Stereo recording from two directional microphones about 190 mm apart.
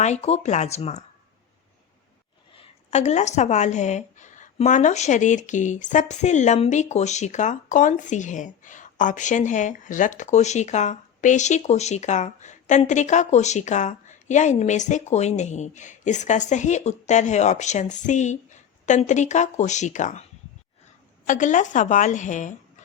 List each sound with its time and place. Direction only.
0.0 s speech: 35° left (ahead or behind)
2.6 s speech: 35° left (ahead or behind)
21.2 s speech: 40° left (ahead or behind)